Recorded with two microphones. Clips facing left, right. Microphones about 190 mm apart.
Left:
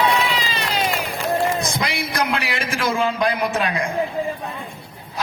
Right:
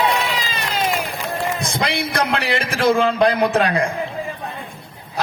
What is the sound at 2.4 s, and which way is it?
A man's voice, 30° right (ahead or behind).